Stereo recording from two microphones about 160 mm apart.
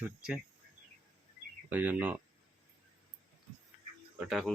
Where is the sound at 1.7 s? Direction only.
10° right (ahead or behind).